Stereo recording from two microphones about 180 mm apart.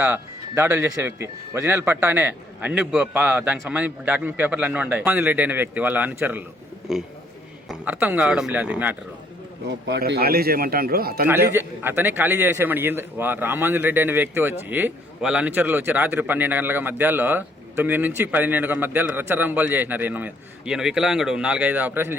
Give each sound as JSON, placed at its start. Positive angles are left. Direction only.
{"t": 0.0, "sound": "a man's voice", "side_deg": -10}
{"t": 9.6, "sound": "a man's voice", "side_deg": -75}
{"t": 11.5, "sound": "a man's voice", "side_deg": -10}